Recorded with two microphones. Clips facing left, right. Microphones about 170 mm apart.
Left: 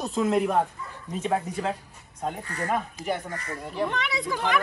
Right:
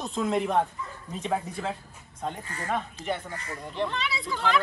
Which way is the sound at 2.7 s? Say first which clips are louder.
Even; 10° left (ahead or behind).